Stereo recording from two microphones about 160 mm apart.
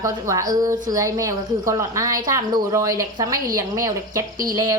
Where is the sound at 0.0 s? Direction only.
20° right (ahead or behind).